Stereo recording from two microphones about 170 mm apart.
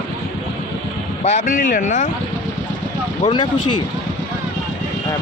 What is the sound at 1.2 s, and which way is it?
Speech, 45° left (ahead or behind).